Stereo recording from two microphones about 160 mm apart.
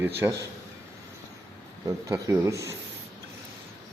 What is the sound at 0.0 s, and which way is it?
Speech, 15° right (ahead or behind).